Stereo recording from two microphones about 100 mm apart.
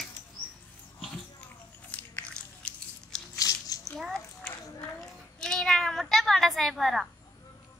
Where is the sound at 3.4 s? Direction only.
35° left (ahead or behind).